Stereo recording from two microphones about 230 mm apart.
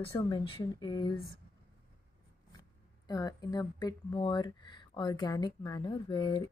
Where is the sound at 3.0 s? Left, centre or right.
Centre.